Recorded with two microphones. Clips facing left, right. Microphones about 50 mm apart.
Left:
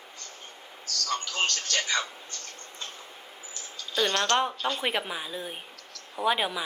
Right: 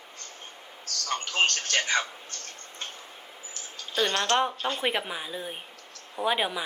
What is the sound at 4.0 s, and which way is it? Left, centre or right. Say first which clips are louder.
Speech: even; centre.